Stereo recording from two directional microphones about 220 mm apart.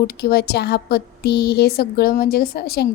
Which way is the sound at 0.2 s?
45° left (ahead or behind).